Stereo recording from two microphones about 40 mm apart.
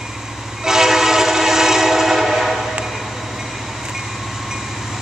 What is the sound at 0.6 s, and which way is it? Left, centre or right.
Train, centre.